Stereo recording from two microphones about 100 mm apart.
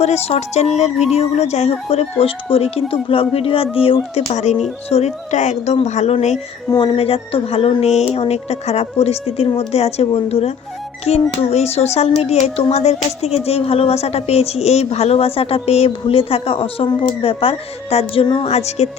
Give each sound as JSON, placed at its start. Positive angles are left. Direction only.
{"t": 0.0, "sound": "a woman's voice", "side_deg": 90}
{"t": 4.3, "sound": "a woman's voice", "side_deg": 90}
{"t": 6.7, "sound": "a woman's voice", "side_deg": 60}